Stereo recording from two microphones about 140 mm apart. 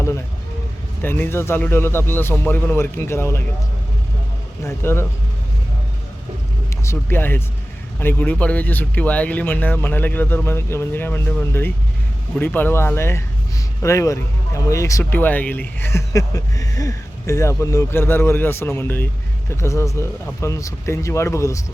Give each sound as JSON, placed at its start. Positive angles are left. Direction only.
{"t": 1.0, "sound": "speech", "side_deg": 15}
{"t": 4.6, "sound": "speech", "side_deg": 20}
{"t": 6.8, "sound": "speech", "side_deg": 15}